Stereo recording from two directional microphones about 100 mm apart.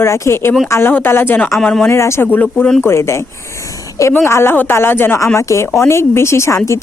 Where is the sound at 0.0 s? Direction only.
25° left (ahead or behind).